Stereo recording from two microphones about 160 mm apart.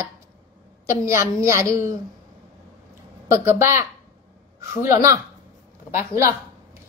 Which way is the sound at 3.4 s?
15° right (ahead or behind).